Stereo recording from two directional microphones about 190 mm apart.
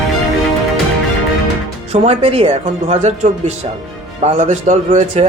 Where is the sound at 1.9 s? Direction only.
30° right (ahead or behind).